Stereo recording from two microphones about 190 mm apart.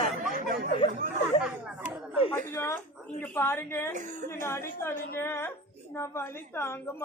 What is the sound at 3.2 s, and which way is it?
A woman's voice, 10° left (ahead or behind).